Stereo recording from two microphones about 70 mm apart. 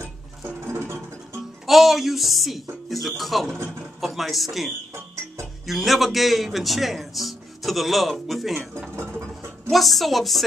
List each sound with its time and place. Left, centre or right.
0.7 s music: right
1.7 s a man's voice: centre
9.7 s a man's voice: centre